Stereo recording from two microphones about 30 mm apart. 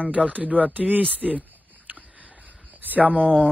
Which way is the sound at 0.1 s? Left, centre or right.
Right.